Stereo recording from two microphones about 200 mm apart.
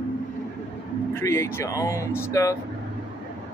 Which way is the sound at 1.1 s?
15° left (ahead or behind).